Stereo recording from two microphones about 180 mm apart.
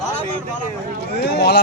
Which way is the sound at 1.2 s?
70° left (ahead or behind).